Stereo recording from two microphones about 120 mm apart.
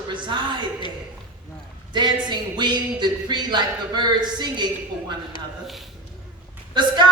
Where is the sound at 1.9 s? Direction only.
40° right (ahead or behind).